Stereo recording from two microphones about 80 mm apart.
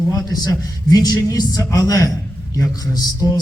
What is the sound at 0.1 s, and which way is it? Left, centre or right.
Speech, left.